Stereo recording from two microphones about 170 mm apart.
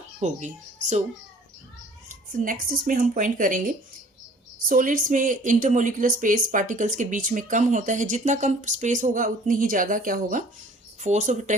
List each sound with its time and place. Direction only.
0.2 s a woman's voice: 45° right (ahead or behind)
2.0 s a woman's voice: 55° right (ahead or behind)